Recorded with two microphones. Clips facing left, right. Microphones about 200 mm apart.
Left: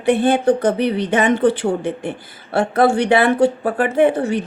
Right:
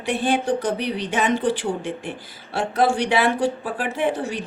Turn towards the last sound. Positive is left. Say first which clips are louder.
# left 8 dB
turn(degrees=60)  # may be behind; listen again after turning